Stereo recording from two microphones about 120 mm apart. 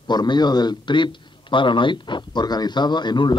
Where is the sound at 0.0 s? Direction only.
35° left (ahead or behind).